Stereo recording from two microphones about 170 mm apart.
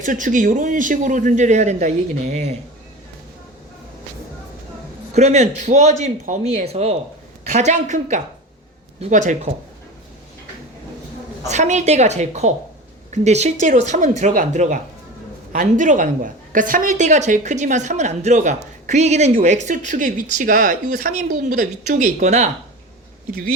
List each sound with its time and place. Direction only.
0.0 s a woman's voice: 50° right (ahead or behind)
5.1 s a woman's voice: 40° right (ahead or behind)
11.4 s a woman's voice: 45° right (ahead or behind)
23.3 s speech: 55° right (ahead or behind)